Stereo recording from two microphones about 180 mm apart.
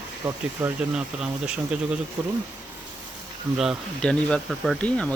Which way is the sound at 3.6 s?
Centre (ahead or behind).